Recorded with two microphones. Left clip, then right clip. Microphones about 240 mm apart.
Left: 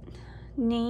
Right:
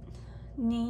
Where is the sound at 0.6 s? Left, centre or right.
Left.